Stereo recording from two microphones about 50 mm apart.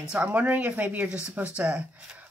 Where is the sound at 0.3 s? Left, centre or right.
Right.